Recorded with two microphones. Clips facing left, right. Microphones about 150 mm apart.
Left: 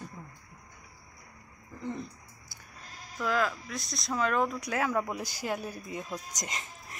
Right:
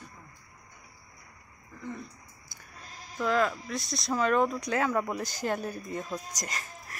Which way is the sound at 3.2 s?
Centre (ahead or behind).